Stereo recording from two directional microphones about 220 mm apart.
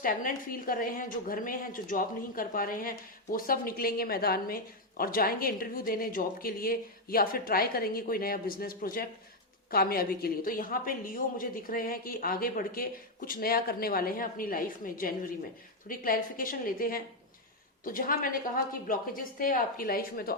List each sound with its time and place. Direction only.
0.0 s a woman's voice: 40° left (ahead or behind)